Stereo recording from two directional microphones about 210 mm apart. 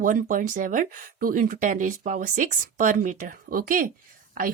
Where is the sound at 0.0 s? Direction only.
40° right (ahead or behind).